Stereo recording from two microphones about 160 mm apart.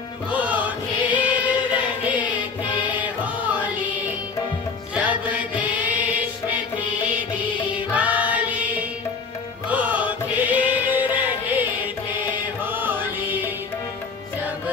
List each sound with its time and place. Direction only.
0.3 s choir: 10° right (ahead or behind)
3.5 s music: 10° right (ahead or behind)
4.9 s music: 10° right (ahead or behind)
7.7 s music: 10° right (ahead or behind)
12.6 s music: 10° right (ahead or behind)